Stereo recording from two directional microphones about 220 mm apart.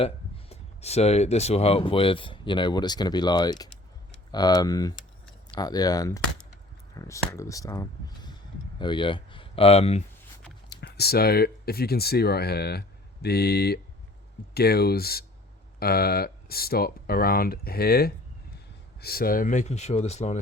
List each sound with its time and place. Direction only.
0.0 s speech: 25° left (ahead or behind)
10.7 s speech: 45° left (ahead or behind); by 20.4 s 30° left (ahead or behind)